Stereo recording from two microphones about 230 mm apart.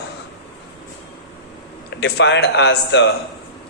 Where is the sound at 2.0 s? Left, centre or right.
Left.